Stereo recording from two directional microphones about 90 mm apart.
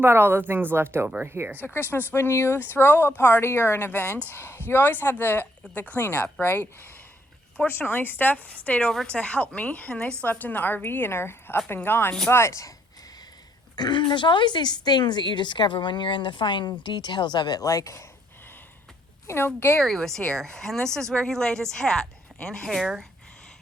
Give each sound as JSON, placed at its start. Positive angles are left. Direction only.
{"t": 0.0, "sound": "speech", "side_deg": -25}
{"t": 1.0, "sound": "speech", "side_deg": -15}
{"t": 1.6, "sound": "a woman's voice", "side_deg": 25}
{"t": 13.7, "sound": "speech", "side_deg": 55}
{"t": 19.3, "sound": "a woman's voice", "side_deg": 25}
{"t": 19.8, "sound": "a woman's voice", "side_deg": 5}